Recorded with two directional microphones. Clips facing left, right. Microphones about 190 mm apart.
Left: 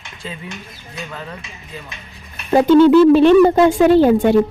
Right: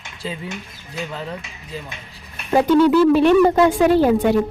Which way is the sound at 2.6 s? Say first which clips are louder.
Left 5 dB; 25° left (ahead or behind).